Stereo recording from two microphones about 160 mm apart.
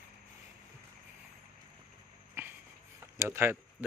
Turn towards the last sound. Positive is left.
turn(degrees=-15)  # may be behind; listen again after turning